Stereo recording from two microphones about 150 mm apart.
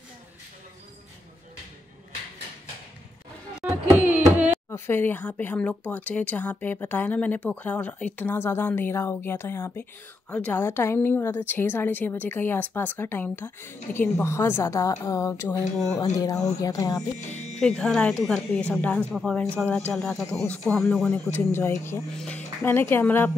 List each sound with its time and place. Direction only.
3.6 s carnatic music: 10° right (ahead or behind)
4.6 s speech: 15° left (ahead or behind)
17.3 s speech: 50° left (ahead or behind)
17.6 s a woman's voice: 5° left (ahead or behind)
21.5 s speech: 15° left (ahead or behind)
22.1 s a woman's voice: 5° left (ahead or behind)